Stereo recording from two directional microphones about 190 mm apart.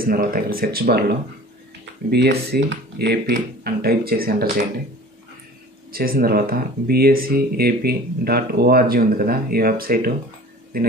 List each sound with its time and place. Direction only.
0.0 s speech: 50° right (ahead or behind)
5.9 s speech: 50° right (ahead or behind)